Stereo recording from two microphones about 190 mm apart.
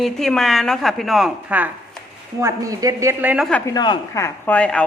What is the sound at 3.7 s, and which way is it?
Speech, 20° left (ahead or behind).